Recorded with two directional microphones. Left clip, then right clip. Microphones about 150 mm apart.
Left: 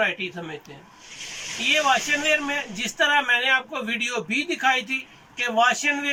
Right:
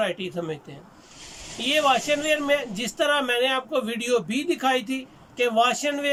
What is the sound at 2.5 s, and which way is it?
A man's voice, 35° right (ahead or behind).